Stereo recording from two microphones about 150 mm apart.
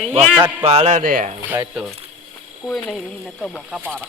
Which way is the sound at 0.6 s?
50° right (ahead or behind).